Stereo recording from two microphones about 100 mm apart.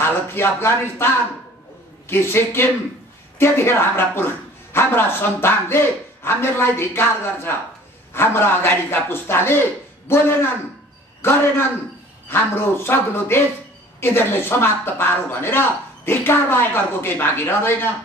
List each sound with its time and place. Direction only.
0.0 s a man's voice: 25° left (ahead or behind)